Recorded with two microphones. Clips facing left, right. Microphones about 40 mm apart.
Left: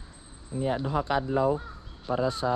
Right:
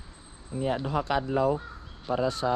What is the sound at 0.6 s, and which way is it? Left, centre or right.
Speech, right.